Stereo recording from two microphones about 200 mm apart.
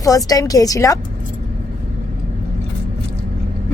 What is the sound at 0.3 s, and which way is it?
Speech, 20° left (ahead or behind).